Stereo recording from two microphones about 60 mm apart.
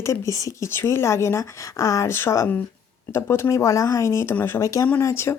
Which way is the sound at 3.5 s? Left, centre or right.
Left.